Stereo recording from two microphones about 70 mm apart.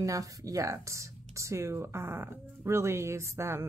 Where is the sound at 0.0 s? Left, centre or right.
Right.